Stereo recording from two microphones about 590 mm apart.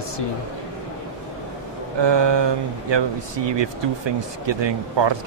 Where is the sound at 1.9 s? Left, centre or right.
Right.